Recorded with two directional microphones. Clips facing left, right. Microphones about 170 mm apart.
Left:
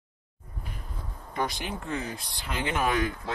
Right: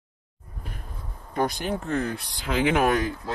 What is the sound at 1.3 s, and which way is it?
Speech, 45° right (ahead or behind).